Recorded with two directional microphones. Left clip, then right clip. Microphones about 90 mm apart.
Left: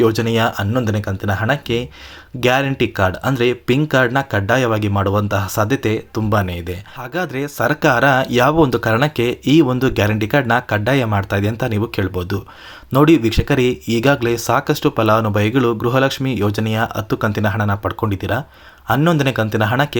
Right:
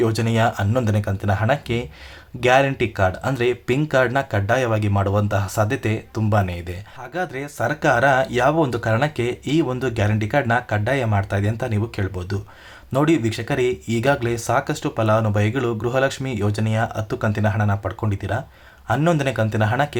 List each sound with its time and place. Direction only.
0.0 s speech: 25° left (ahead or behind)
0.7 s speech: 15° left (ahead or behind); by 18.4 s 45° left (ahead or behind)
18.9 s speech: 35° left (ahead or behind)